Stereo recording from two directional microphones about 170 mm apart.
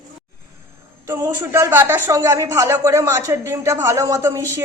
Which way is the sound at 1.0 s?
15° right (ahead or behind).